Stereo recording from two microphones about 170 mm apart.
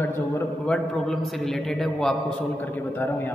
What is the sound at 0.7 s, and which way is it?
A man's voice, 5° left (ahead or behind).